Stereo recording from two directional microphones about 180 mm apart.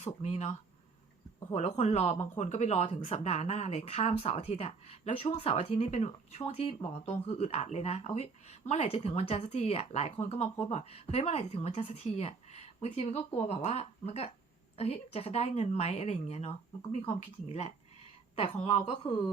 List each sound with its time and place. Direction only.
0.0 s speech: 40° left (ahead or behind)
1.8 s speech: 40° left (ahead or behind)